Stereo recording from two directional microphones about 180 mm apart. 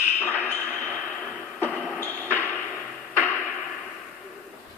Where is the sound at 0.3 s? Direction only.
10° right (ahead or behind).